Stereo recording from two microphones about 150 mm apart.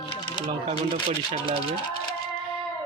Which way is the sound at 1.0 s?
40° right (ahead or behind).